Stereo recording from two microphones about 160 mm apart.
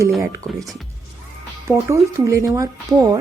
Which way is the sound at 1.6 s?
20° right (ahead or behind).